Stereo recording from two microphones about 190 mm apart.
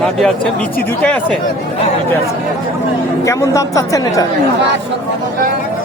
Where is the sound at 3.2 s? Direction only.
15° left (ahead or behind).